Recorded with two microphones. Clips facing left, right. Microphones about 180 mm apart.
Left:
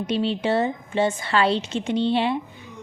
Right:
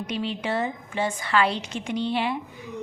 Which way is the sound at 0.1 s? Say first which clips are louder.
Left 6 dB; 30° left (ahead or behind).